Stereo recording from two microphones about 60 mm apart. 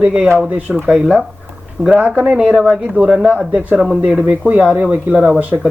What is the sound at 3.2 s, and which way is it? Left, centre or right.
Speech, right.